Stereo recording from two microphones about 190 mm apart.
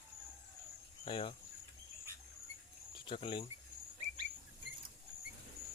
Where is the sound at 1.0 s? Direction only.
25° left (ahead or behind).